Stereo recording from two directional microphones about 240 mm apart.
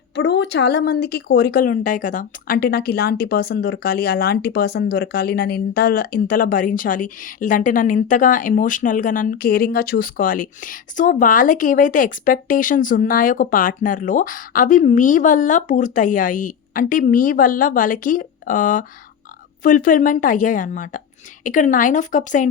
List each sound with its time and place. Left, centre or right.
0.2 s speech: left